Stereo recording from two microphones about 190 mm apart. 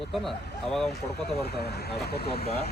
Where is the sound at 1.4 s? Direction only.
60° left (ahead or behind).